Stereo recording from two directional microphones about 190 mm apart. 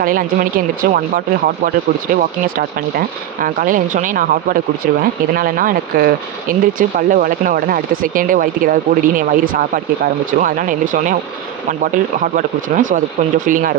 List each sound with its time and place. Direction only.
0.0 s speech: 50° right (ahead or behind)
3.4 s speech: 45° right (ahead or behind)